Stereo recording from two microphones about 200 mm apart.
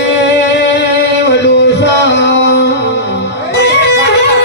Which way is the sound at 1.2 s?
60° left (ahead or behind).